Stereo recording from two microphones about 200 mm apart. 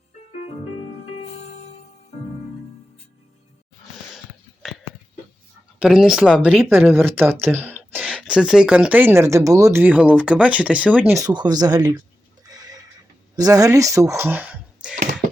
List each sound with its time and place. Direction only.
5.8 s speech: 5° right (ahead or behind)
7.4 s a sound: 10° right (ahead or behind)
8.0 s speech: centre (ahead or behind)
11.3 s speech: 20° right (ahead or behind)
12.4 s neigh: 20° right (ahead or behind)
13.3 s speech: 20° right (ahead or behind)